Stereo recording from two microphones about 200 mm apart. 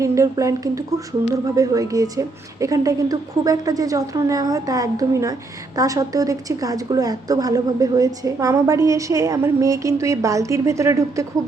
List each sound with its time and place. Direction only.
0.0 s a woman's voice: 15° right (ahead or behind)